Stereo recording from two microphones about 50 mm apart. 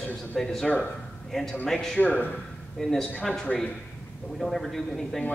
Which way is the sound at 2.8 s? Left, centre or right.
Centre.